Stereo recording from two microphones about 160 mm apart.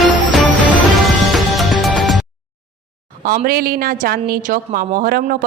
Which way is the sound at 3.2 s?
65° right (ahead or behind).